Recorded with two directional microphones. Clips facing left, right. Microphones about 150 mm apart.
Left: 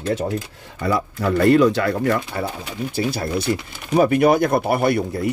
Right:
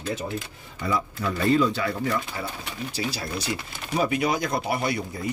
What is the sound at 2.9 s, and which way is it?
Speech, 55° left (ahead or behind).